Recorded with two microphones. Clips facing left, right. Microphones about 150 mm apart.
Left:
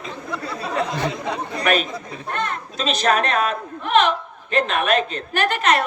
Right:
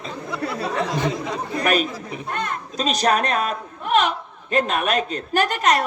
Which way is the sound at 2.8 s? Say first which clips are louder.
Even; 40° right (ahead or behind).